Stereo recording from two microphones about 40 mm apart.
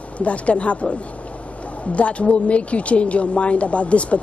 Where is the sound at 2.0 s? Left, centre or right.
Left.